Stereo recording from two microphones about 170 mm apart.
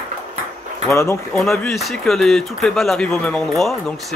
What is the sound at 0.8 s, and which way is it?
Speech, 15° left (ahead or behind).